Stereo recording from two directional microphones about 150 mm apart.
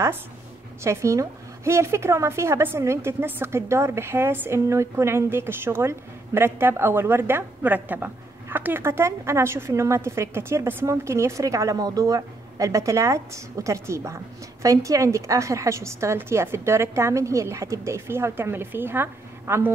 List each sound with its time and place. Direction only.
0.8 s a woman's voice: 20° right (ahead or behind)